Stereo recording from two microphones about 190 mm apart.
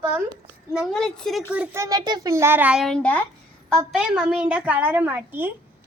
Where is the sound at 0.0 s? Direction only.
15° right (ahead or behind).